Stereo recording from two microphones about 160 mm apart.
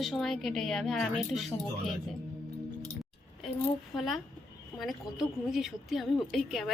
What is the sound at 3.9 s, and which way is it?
A woman's voice, centre (ahead or behind).